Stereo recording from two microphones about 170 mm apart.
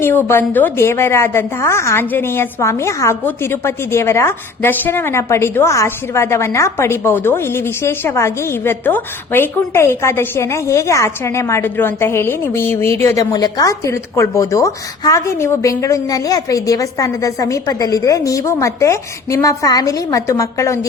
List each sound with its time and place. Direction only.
0.3 s a woman's voice: 10° left (ahead or behind)